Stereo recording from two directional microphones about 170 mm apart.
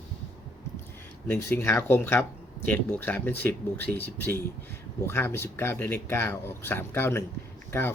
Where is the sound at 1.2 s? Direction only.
10° left (ahead or behind).